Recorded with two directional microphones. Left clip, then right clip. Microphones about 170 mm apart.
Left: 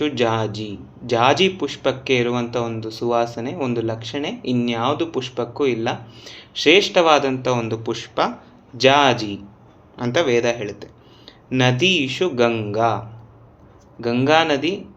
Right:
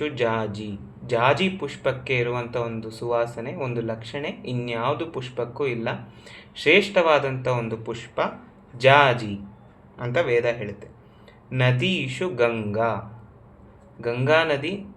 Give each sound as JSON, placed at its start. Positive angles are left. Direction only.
{"t": 0.0, "sound": "a man's voice", "side_deg": 25}
{"t": 14.0, "sound": "speech", "side_deg": 30}